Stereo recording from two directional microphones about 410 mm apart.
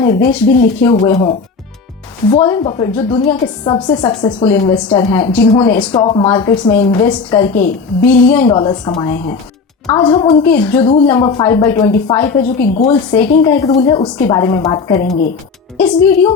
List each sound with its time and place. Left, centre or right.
0.3 s a woman's voice: centre
12.5 s speech: left
12.9 s a woman's voice: centre